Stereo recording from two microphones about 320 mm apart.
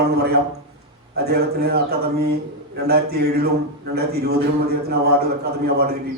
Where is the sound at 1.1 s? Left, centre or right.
Right.